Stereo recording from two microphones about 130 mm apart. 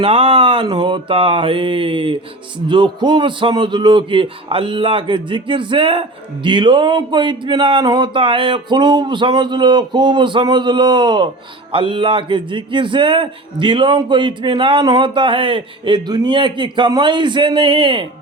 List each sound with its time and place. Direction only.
0.0 s a man's voice: 45° right (ahead or behind)